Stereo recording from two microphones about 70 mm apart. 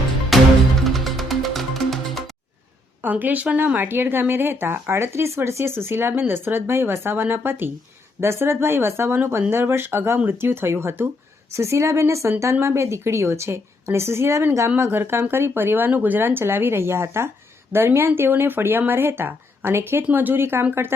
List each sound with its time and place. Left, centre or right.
0.3 s music: centre
3.0 s a woman's voice: right
14.8 s speech: right